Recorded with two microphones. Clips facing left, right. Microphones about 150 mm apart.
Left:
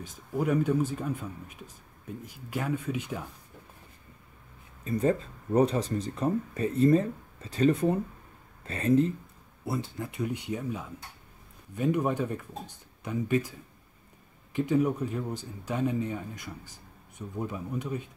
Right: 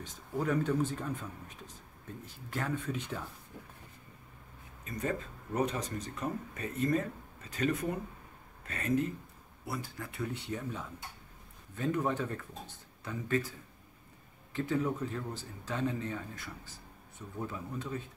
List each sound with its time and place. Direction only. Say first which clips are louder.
0.0 s speech: left 4 dB; 10° left (ahead or behind)
4.8 s speech: left 9 dB; 30° left (ahead or behind); by 13.5 s 15° left (ahead or behind)
14.5 s speech: left 6 dB; 15° left (ahead or behind)